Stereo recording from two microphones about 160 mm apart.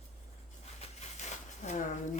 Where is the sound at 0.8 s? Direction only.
45° left (ahead or behind).